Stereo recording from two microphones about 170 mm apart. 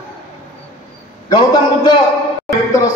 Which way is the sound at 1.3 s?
25° left (ahead or behind).